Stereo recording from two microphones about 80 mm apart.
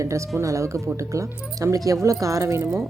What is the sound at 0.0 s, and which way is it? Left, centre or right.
Speech, right.